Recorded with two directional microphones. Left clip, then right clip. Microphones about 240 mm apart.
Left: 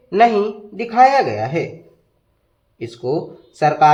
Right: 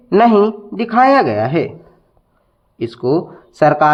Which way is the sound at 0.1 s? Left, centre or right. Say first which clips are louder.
Right 3 dB; right.